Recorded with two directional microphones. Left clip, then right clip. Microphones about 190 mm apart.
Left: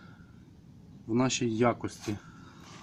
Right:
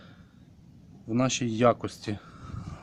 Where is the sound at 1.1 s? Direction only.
20° right (ahead or behind).